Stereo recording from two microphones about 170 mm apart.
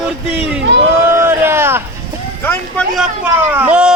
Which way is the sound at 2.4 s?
10° left (ahead or behind).